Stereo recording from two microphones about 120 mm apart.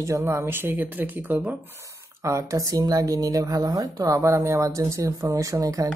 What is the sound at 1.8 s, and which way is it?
A woman's voice, 25° right (ahead or behind).